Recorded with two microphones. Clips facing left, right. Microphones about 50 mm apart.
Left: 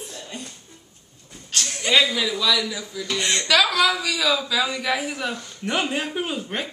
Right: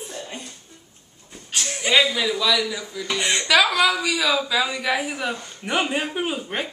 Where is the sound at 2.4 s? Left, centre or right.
Centre.